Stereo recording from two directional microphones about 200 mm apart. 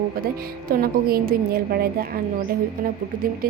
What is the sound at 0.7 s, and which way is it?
A woman's voice, 45° right (ahead or behind).